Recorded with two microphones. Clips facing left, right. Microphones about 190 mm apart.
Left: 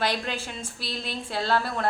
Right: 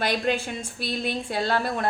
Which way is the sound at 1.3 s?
15° right (ahead or behind).